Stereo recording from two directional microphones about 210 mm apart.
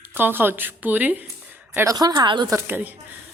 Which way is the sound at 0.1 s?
10° right (ahead or behind).